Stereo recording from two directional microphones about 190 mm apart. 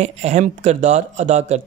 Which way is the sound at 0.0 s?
35° right (ahead or behind).